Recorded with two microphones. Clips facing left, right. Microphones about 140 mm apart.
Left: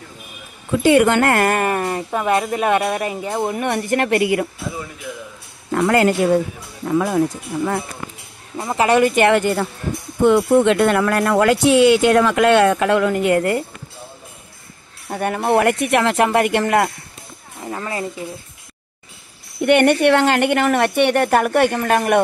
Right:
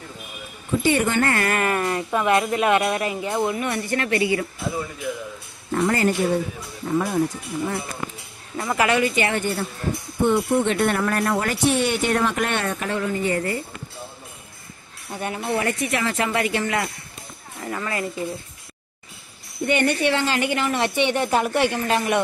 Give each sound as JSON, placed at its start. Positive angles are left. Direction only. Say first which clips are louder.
{"t": 0.7, "sound": "a woman's voice", "louder": "left 7 dB", "side_deg": 75}
{"t": 1.3, "sound": "speech", "louder": "left 5 dB", "side_deg": 45}
{"t": 3.5, "sound": "a woman's voice", "louder": "left 5 dB", "side_deg": 55}
{"t": 5.7, "sound": "speech", "louder": "left 5 dB", "side_deg": 75}
{"t": 8.5, "sound": "speech", "louder": "left 3 dB", "side_deg": 25}
{"t": 8.9, "sound": "a woman's voice", "louder": "left 8 dB", "side_deg": 55}
{"t": 15.0, "sound": "a woman's voice", "louder": "left 7 dB", "side_deg": 55}
{"t": 17.6, "sound": "speech", "louder": "left 2 dB", "side_deg": 20}
{"t": 19.6, "sound": "a woman's voice", "louder": "left 7 dB", "side_deg": 65}